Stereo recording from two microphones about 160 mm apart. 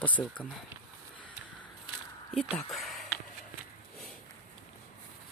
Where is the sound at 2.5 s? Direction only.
Centre (ahead or behind).